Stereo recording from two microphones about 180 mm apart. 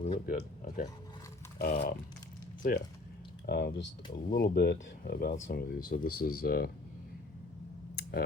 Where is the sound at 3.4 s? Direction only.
70° left (ahead or behind).